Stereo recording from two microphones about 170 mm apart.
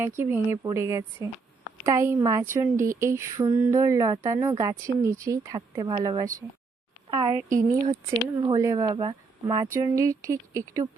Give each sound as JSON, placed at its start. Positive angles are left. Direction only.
{"t": 0.0, "sound": "speech", "side_deg": -15}